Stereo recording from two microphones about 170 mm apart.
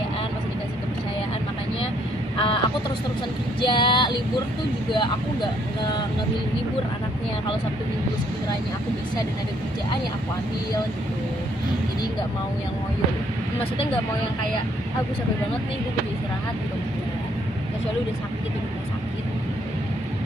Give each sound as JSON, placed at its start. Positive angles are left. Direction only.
{"t": 2.3, "sound": "crow", "side_deg": 30}
{"t": 3.6, "sound": "female singing", "side_deg": 30}